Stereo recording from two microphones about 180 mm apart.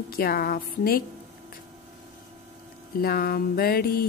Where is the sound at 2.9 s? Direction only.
55° left (ahead or behind).